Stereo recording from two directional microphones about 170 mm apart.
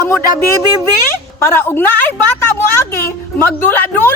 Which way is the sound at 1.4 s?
15° left (ahead or behind).